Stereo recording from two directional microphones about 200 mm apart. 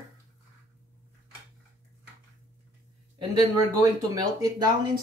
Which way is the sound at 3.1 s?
20° right (ahead or behind).